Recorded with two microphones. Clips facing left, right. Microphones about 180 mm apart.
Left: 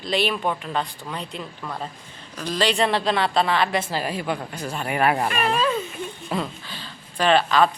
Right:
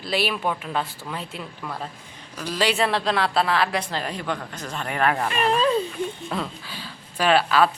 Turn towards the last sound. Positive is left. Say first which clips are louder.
# left 1 dB
turn(degrees=-5)  # may be behind; listen again after turning